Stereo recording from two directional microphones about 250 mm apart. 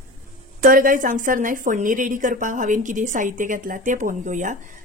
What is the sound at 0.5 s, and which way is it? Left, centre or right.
Speech, right.